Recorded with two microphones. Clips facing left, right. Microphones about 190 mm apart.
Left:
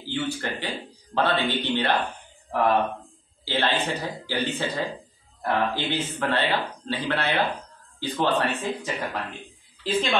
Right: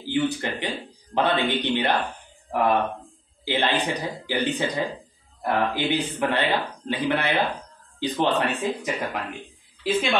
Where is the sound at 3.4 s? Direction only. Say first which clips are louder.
Right 1 dB; 15° right (ahead or behind).